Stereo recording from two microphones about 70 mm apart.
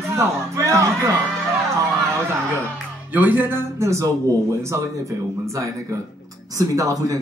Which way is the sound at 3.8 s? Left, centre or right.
Right.